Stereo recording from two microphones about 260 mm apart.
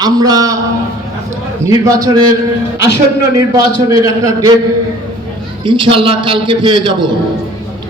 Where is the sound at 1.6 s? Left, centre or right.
Centre.